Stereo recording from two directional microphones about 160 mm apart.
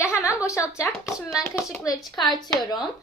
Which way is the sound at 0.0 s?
20° left (ahead or behind).